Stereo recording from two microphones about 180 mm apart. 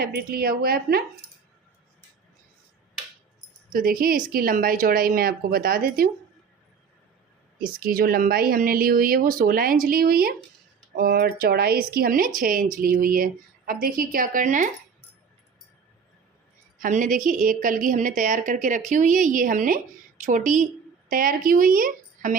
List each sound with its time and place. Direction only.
0.0 s a woman's voice: 55° right (ahead or behind)
3.7 s speech: 50° right (ahead or behind)
7.6 s a woman's voice: 55° right (ahead or behind)
16.7 s a woman's voice: 45° right (ahead or behind)